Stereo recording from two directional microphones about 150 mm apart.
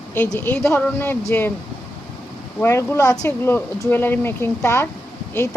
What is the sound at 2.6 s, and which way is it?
A woman's voice, 20° left (ahead or behind).